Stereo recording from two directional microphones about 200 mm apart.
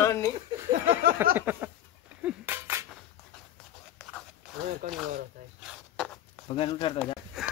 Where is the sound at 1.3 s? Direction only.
10° right (ahead or behind).